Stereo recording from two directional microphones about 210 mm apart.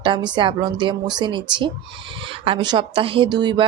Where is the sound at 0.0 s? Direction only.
20° right (ahead or behind).